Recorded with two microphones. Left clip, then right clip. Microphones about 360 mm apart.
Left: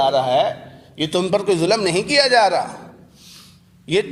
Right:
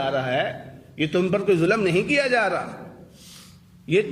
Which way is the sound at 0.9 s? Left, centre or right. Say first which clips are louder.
Left 4 dB; centre.